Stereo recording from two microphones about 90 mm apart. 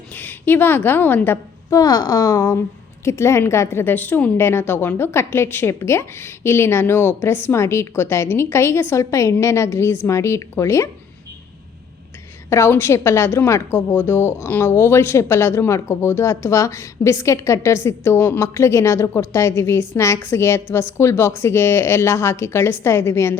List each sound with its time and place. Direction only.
0.1 s a woman's voice: 20° left (ahead or behind)
1.7 s speech: 45° left (ahead or behind)
12.5 s speech: 30° left (ahead or behind)